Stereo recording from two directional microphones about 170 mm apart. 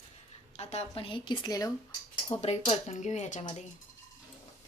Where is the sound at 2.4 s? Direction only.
40° left (ahead or behind).